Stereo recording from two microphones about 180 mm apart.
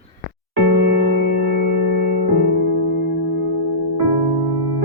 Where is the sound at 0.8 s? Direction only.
65° right (ahead or behind).